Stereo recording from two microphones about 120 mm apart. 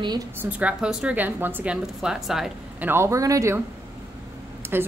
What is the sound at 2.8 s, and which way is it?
Speech, 20° right (ahead or behind).